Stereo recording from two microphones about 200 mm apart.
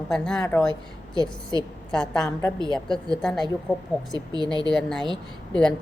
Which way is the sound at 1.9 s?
5° left (ahead or behind).